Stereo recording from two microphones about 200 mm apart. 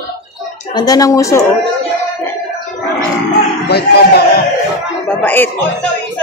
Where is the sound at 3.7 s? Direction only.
55° left (ahead or behind).